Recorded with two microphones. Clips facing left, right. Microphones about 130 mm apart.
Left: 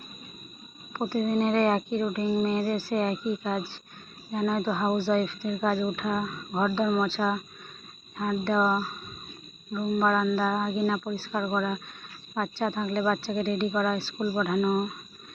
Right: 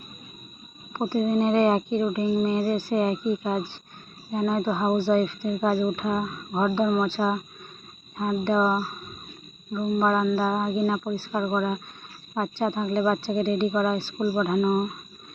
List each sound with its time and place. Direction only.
0.9 s speech: 15° right (ahead or behind)
10.1 s speech: 10° right (ahead or behind)